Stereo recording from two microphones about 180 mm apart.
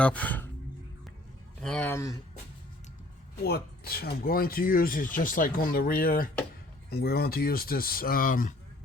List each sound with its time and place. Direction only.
0.0 s speech: 10° left (ahead or behind)
1.6 s speech: 5° left (ahead or behind)
3.4 s speech: 60° left (ahead or behind)